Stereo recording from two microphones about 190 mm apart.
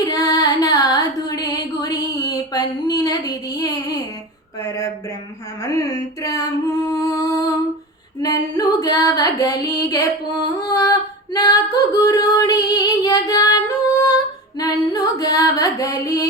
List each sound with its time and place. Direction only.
0.0 s child singing: 20° left (ahead or behind)
5.6 s music: 15° left (ahead or behind)
8.2 s female singing: 20° left (ahead or behind)
14.6 s a sound: 20° left (ahead or behind)